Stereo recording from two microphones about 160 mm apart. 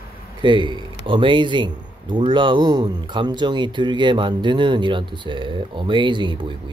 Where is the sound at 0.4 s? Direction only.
30° right (ahead or behind).